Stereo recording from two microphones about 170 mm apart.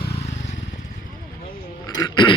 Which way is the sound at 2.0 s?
25° left (ahead or behind).